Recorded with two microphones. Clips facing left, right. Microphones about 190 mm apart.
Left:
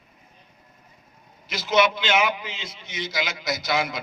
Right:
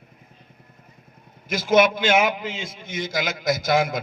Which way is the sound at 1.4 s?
50° right (ahead or behind).